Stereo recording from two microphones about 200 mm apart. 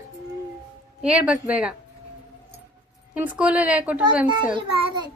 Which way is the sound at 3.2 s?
5° right (ahead or behind).